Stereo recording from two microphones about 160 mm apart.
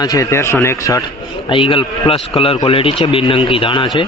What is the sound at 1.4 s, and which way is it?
Speech, 35° left (ahead or behind).